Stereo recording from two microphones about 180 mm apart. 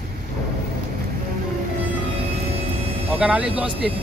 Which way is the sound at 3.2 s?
5° right (ahead or behind).